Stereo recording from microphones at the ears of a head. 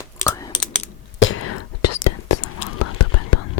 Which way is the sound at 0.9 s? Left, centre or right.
Left.